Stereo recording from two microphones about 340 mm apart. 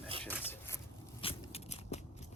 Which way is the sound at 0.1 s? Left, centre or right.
Centre.